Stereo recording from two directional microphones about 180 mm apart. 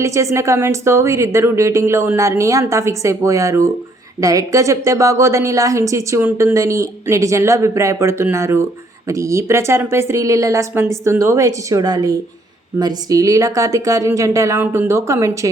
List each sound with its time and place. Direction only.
0.0 s a woman's voice: 15° right (ahead or behind)